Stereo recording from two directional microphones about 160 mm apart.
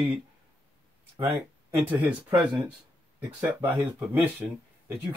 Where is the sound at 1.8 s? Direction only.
15° right (ahead or behind).